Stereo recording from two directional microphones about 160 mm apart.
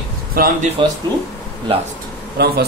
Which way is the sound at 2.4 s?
90° right.